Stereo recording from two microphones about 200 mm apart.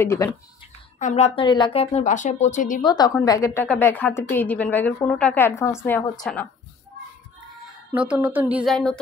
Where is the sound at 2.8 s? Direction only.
20° left (ahead or behind); by 6.4 s 5° left (ahead or behind).